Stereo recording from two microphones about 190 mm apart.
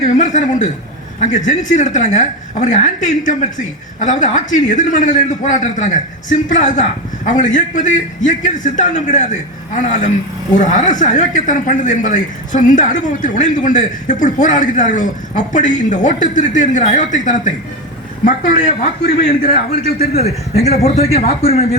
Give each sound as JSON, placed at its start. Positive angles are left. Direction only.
{"t": 0.0, "sound": "a man's voice", "side_deg": 40}